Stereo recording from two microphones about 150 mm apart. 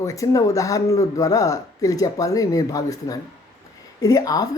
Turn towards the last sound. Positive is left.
turn(degrees=25)  # may be behind; listen again after turning